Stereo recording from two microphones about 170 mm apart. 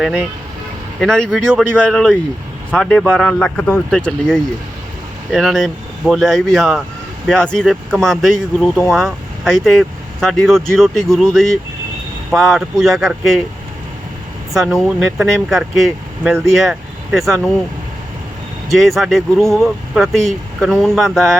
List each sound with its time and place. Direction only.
0.9 s speech: 5° left (ahead or behind)
14.5 s speech: centre (ahead or behind)
18.7 s speech: centre (ahead or behind)